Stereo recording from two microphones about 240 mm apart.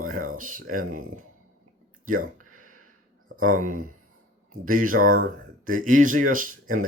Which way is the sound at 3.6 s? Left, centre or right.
Right.